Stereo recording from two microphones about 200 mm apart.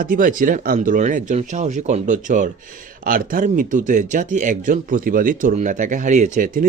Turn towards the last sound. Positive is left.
turn(degrees=-45)  # may be behind; listen again after turning